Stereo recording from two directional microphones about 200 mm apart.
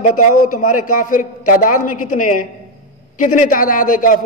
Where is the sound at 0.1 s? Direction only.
90° left.